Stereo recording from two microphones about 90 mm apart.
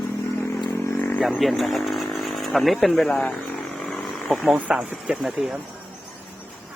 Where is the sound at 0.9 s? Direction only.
15° left (ahead or behind).